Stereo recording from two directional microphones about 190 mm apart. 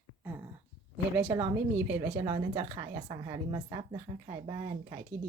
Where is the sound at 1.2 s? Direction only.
10° right (ahead or behind).